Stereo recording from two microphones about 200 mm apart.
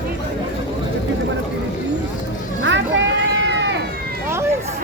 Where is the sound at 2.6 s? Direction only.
65° right (ahead or behind).